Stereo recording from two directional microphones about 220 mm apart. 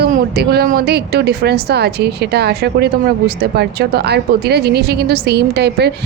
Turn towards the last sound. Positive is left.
turn(degrees=-50)  # may be behind; listen again after turning